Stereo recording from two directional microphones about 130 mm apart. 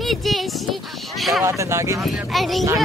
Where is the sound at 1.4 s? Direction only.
20° right (ahead or behind).